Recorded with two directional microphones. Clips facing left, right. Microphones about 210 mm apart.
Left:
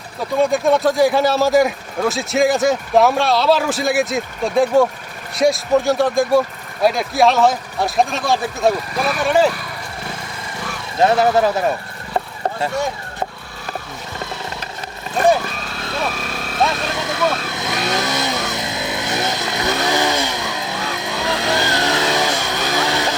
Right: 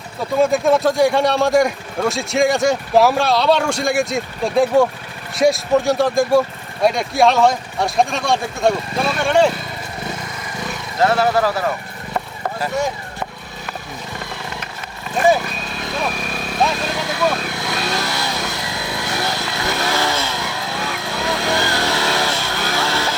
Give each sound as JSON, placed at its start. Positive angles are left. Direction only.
{"t": 0.2, "sound": "speech", "side_deg": 0}
{"t": 10.9, "sound": "speech", "side_deg": 20}
{"t": 12.1, "sound": "horse", "side_deg": 25}
{"t": 15.7, "sound": "vehicle", "side_deg": -20}
{"t": 17.5, "sound": "vehicle", "side_deg": 20}